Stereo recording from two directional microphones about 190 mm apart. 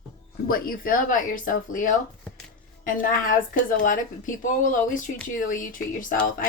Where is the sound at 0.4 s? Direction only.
50° left (ahead or behind).